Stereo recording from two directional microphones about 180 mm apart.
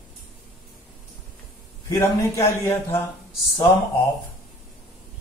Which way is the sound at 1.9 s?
15° left (ahead or behind).